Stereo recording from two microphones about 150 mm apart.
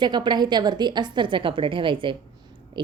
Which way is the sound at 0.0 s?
30° right (ahead or behind).